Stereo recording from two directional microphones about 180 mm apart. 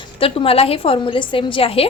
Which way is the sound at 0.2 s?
30° left (ahead or behind).